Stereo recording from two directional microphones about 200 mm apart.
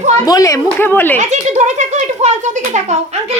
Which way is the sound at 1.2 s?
35° right (ahead or behind).